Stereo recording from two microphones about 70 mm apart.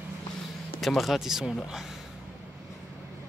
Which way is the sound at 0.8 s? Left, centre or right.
Centre.